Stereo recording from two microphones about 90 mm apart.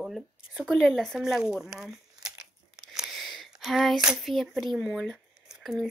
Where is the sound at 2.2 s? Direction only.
5° right (ahead or behind).